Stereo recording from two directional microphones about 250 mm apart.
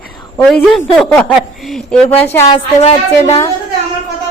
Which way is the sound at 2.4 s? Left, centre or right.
Left.